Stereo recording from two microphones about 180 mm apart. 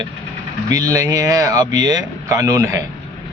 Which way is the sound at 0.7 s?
20° right (ahead or behind).